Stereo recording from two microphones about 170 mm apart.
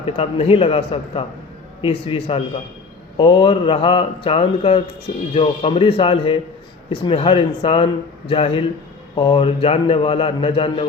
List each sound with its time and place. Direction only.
0.0 s a man's voice: 35° left (ahead or behind)